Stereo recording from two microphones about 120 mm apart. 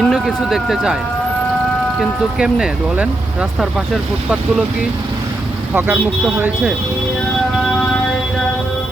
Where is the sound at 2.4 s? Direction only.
5° right (ahead or behind).